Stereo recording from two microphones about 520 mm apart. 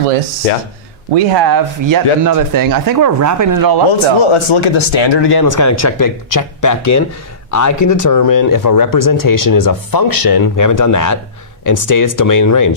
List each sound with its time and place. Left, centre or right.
1.1 s speech: right
4.2 s speech: left